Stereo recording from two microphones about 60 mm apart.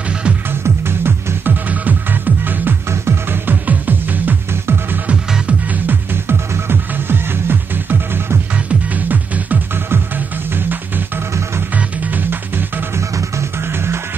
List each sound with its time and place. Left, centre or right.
0.8 s music: right
1.7 s music: right
2.9 s music: right
6.5 s music: right
11.7 s music: right
12.9 s music: right